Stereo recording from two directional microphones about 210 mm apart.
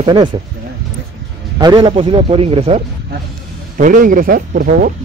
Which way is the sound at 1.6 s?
20° right (ahead or behind).